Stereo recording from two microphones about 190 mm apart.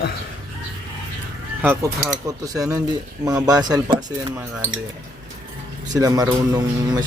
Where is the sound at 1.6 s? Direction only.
15° right (ahead or behind).